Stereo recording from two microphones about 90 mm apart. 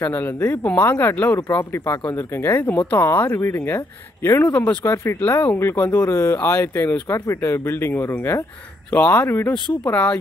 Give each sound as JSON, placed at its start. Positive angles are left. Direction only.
{"t": 0.0, "sound": "speech", "side_deg": 20}